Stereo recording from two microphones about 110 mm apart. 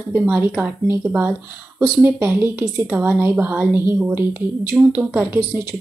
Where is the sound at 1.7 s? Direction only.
20° right (ahead or behind).